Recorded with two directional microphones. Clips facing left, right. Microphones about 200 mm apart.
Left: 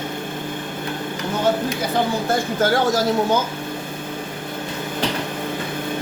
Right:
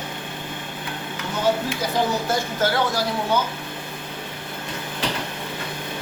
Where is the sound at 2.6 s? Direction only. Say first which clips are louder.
Left 4 dB; 45° left (ahead or behind).